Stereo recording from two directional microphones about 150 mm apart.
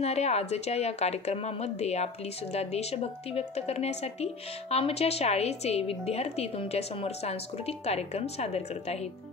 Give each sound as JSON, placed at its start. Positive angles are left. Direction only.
{"t": 0.0, "sound": "a woman's voice", "side_deg": 45}